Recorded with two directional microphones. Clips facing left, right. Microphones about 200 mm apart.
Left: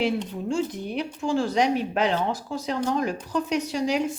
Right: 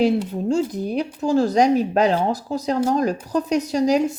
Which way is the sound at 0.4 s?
40° right (ahead or behind).